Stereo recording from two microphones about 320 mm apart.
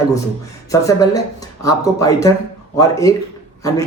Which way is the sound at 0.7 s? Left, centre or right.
Centre.